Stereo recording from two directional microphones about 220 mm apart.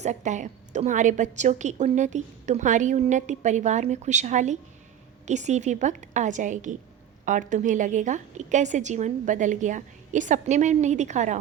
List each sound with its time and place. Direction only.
0.0 s a woman's voice: 35° right (ahead or behind)